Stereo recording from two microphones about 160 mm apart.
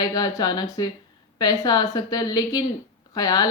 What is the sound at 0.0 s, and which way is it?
A woman's voice, 25° left (ahead or behind).